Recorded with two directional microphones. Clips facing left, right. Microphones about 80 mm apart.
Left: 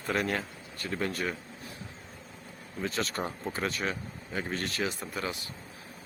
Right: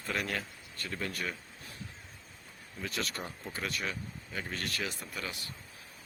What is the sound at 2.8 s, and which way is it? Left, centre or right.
Speech, left.